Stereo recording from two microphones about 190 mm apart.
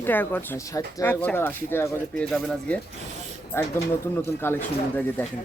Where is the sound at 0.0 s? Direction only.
10° left (ahead or behind).